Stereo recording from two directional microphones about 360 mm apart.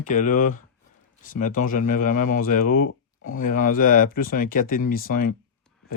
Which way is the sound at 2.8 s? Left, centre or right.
Left.